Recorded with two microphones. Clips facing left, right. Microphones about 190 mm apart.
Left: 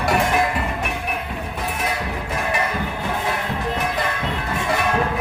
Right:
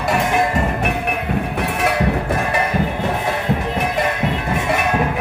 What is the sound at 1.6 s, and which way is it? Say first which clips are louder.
Music: right 3 dB; 70° right (ahead or behind).